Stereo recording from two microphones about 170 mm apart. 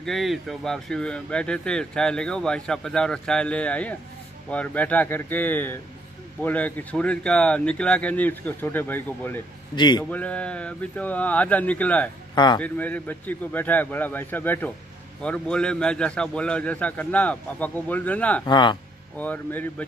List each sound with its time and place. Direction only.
0.0 s a man's voice: centre (ahead or behind)
9.8 s speech: 25° left (ahead or behind)
10.0 s a man's voice: 10° left (ahead or behind)
18.4 s speech: 25° left (ahead or behind)
19.1 s a man's voice: 10° left (ahead or behind)